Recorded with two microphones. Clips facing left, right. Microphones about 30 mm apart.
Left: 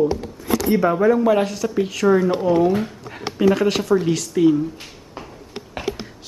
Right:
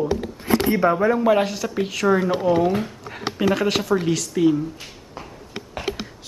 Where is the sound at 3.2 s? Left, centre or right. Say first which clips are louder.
Left 4 dB; centre.